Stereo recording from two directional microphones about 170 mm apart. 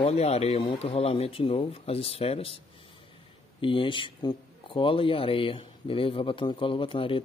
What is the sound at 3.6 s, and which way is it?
Speech, 30° left (ahead or behind).